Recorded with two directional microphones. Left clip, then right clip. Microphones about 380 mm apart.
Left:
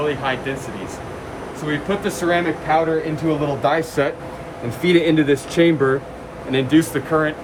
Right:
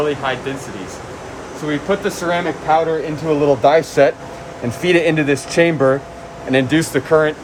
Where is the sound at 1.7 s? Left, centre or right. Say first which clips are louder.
Right 4 dB; centre.